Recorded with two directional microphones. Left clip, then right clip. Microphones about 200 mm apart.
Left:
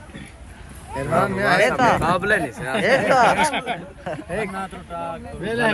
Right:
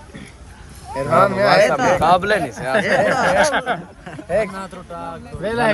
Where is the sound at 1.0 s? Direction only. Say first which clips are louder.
Right 6 dB; 35° right (ahead or behind).